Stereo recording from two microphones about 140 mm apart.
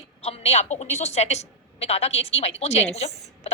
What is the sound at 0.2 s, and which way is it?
A woman's voice, 45° left (ahead or behind).